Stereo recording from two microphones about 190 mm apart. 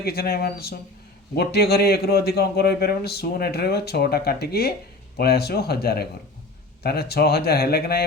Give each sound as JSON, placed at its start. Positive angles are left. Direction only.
{"t": 0.0, "sound": "a man's voice", "side_deg": 55}